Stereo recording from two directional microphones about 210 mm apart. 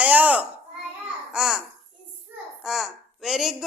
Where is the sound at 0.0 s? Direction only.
5° right (ahead or behind).